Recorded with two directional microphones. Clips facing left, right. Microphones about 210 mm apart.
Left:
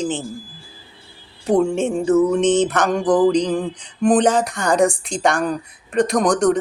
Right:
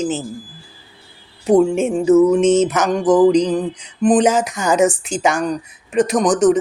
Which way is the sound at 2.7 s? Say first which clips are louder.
Right 2 dB; 5° right (ahead or behind).